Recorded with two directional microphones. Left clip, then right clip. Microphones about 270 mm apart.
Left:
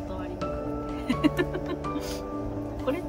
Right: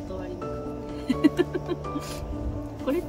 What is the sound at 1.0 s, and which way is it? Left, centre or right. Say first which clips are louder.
Music: right 3 dB; centre.